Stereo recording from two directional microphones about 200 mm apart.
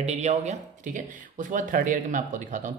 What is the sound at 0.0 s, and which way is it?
Speech, 35° right (ahead or behind).